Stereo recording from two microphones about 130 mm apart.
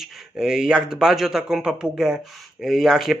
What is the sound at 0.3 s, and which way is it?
Speech, 5° right (ahead or behind).